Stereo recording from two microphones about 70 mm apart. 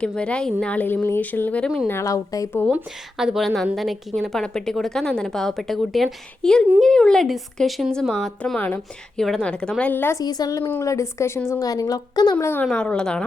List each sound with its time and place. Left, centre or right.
0.0 s a woman's voice: centre
2.0 s a woman's voice: left
3.2 s a woman's voice: centre
8.5 s speech: left
9.1 s a woman's voice: centre
9.9 s speech: left
10.2 s a woman's voice: left
10.8 s a woman's voice: left
11.6 s a woman's voice: left
12.4 s speech: left
12.6 s a woman's voice: centre